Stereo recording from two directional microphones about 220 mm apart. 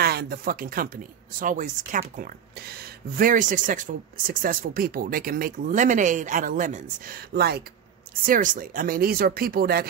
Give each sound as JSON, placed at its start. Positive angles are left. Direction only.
{"t": 0.0, "sound": "speech", "side_deg": -45}